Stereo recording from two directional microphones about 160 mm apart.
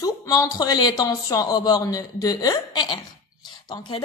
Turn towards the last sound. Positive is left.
turn(degrees=30)  # may be behind; listen again after turning